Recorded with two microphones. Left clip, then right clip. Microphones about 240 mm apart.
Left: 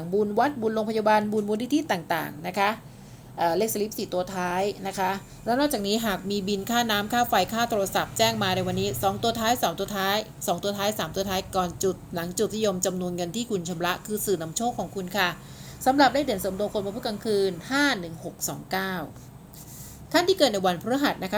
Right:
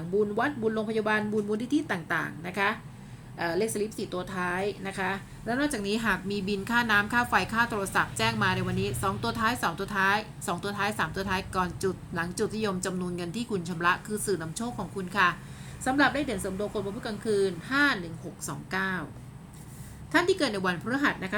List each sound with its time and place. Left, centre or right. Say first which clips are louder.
0.3 s a woman's voice: left 4 dB; centre
20.1 s a woman's voice: left 4 dB; centre